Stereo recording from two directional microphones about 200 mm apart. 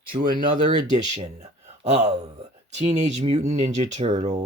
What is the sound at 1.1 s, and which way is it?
Speech, 35° right (ahead or behind).